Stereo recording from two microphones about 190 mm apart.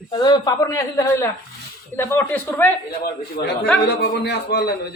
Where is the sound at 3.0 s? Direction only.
55° left (ahead or behind).